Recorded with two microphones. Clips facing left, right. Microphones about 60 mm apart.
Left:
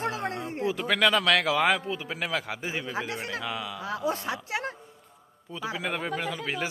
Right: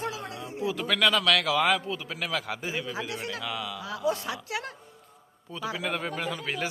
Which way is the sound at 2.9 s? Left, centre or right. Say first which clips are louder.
Left 2 dB; left.